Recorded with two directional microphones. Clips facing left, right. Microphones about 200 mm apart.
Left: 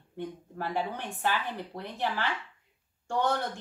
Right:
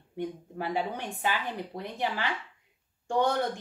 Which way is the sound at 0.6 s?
15° right (ahead or behind).